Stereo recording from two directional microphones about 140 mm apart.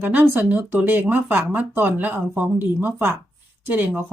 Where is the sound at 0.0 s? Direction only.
10° right (ahead or behind).